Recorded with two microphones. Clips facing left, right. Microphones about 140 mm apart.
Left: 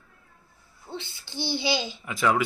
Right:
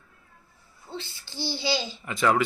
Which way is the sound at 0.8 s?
15° left (ahead or behind).